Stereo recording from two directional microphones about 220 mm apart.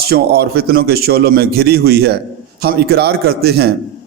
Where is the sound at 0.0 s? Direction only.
45° right (ahead or behind).